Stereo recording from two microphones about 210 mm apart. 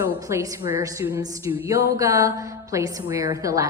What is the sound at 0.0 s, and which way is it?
A woman's voice, 15° right (ahead or behind).